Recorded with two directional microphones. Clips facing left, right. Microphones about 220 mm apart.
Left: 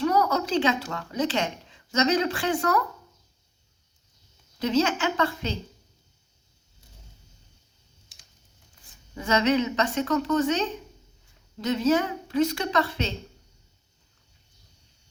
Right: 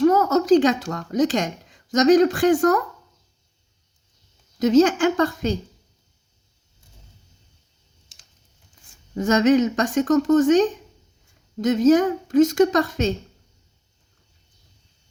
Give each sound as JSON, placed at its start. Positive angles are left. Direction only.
{"t": 0.0, "sound": "speech", "side_deg": -45}
{"t": 4.6, "sound": "a woman's voice", "side_deg": -45}
{"t": 9.1, "sound": "a woman's voice", "side_deg": -45}